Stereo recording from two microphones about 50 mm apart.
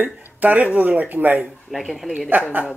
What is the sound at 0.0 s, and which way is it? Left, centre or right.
Speech, right.